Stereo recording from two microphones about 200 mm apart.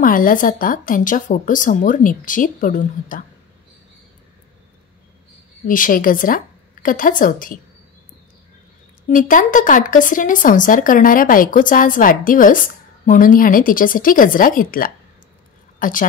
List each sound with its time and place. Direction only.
0.0 s a woman's voice: 45° left (ahead or behind)
5.7 s speech: 45° left (ahead or behind)
9.1 s speech: 40° left (ahead or behind)